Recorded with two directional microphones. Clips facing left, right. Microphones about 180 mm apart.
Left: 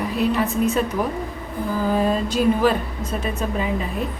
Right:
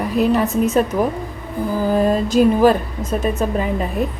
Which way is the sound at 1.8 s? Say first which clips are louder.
Right 4 dB; 40° right (ahead or behind).